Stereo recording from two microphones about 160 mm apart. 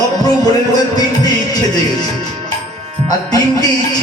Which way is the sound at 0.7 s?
25° left (ahead or behind).